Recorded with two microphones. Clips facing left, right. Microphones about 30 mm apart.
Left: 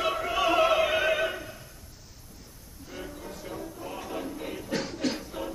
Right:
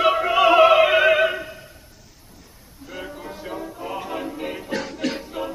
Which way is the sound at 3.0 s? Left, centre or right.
Right.